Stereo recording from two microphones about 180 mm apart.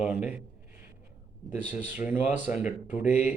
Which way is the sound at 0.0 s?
5° right (ahead or behind).